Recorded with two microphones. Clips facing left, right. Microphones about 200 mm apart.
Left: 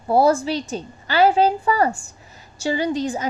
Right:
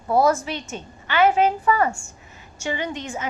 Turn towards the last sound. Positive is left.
turn(degrees=35)  # may be behind; listen again after turning